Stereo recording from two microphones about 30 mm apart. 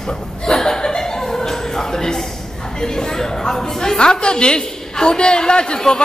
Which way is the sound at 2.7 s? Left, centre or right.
Left.